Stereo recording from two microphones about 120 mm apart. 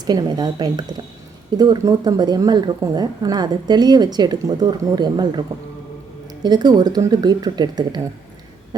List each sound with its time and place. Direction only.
0.0 s a woman's voice: 35° right (ahead or behind)